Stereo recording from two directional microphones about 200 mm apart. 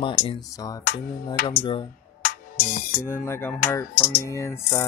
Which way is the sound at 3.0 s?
10° left (ahead or behind).